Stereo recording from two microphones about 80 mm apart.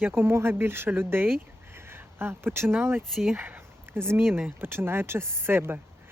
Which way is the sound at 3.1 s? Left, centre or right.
Centre.